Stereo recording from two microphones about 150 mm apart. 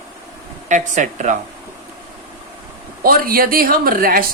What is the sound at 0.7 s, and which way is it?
Speech, 55° right (ahead or behind).